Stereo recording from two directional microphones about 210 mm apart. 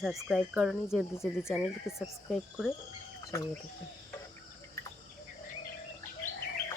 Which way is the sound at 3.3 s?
15° left (ahead or behind).